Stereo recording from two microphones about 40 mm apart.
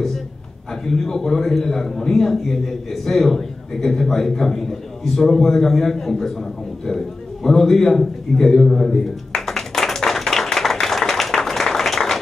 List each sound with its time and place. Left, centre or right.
0.8 s a man's voice: centre
7.4 s a man's voice: centre
9.5 s tap: centre